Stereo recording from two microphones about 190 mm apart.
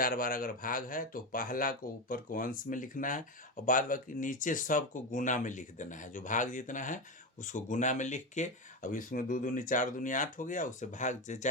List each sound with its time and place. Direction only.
0.0 s speech: 50° left (ahead or behind)